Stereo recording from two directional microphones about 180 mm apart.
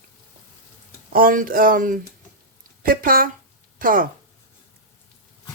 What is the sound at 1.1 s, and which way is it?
Speech, 50° right (ahead or behind).